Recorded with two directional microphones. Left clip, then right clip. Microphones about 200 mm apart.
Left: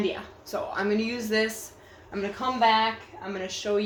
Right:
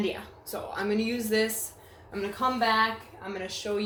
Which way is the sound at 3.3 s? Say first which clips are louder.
Left 2 dB; 20° left (ahead or behind).